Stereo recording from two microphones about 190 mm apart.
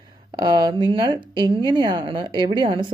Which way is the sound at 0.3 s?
20° right (ahead or behind).